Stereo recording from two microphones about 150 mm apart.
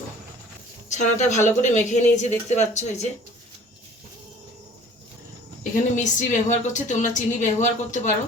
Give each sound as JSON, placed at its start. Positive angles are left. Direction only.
{"t": 0.9, "sound": "speech", "side_deg": 50}
{"t": 5.7, "sound": "speech", "side_deg": 60}